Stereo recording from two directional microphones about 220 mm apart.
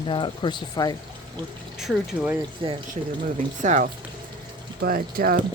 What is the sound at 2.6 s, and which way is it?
Speech, 25° right (ahead or behind).